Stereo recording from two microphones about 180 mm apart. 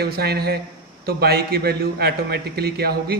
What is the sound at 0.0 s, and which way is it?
A man's voice, 60° right (ahead or behind).